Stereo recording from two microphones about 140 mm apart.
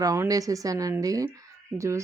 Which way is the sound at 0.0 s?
25° right (ahead or behind).